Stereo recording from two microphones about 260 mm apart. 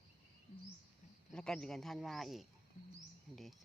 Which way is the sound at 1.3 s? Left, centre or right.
Centre.